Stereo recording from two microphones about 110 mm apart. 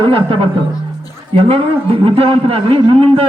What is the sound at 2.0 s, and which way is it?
A man's voice, 55° right (ahead or behind).